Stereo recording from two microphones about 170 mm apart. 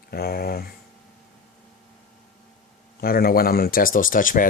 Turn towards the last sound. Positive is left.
turn(degrees=50)  # may be behind; listen again after turning